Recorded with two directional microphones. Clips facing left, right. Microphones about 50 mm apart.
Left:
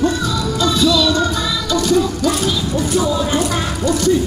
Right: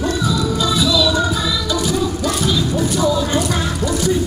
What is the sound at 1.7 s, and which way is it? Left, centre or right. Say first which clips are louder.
Vehicle: left 6 dB; centre.